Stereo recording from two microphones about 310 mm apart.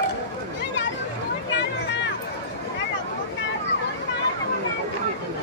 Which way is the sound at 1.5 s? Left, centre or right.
Left.